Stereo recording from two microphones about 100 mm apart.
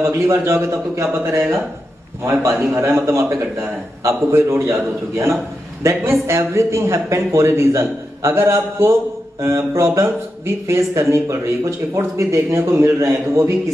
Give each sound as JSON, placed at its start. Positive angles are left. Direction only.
{"t": 0.0, "sound": "speech", "side_deg": -25}